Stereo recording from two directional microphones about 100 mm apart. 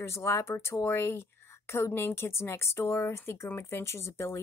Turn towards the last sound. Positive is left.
turn(degrees=25)  # may be behind; listen again after turning